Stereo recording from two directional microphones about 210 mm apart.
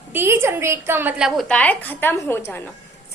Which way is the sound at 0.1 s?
10° right (ahead or behind).